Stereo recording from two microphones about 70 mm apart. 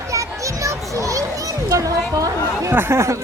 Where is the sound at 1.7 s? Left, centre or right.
Right.